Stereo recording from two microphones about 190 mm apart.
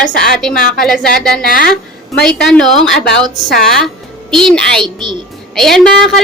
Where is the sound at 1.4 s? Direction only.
50° left (ahead or behind).